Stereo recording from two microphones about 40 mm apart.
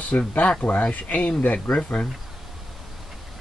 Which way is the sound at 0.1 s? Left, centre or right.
Left.